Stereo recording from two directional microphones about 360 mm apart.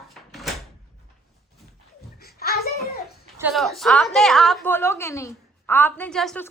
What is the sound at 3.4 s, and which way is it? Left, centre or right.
A woman's voice, centre.